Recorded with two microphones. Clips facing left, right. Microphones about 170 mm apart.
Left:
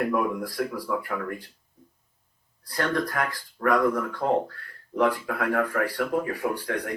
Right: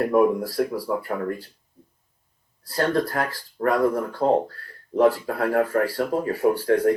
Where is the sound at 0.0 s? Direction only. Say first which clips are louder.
Right 6 dB; 35° right (ahead or behind).